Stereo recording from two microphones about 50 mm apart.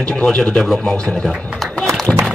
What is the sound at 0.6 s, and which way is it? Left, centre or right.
Speech, centre.